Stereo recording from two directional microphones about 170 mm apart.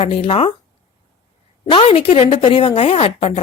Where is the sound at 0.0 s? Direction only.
35° left (ahead or behind).